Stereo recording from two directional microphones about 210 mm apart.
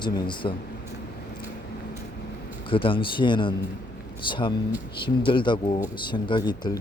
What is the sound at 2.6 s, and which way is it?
A man's voice, 25° left (ahead or behind).